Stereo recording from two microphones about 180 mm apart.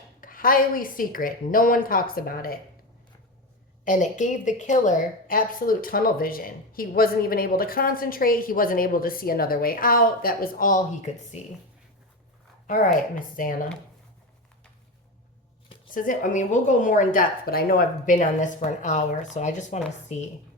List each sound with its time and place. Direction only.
0.2 s a woman's voice: 50° left (ahead or behind)
3.8 s a woman's voice: 45° left (ahead or behind)
12.6 s a woman's voice: 50° left (ahead or behind)
15.9 s a woman's voice: 50° left (ahead or behind)